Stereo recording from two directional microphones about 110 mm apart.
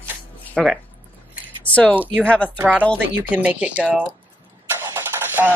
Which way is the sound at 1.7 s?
15° left (ahead or behind).